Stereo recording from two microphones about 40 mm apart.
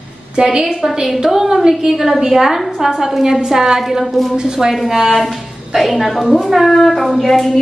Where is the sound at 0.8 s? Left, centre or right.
Centre.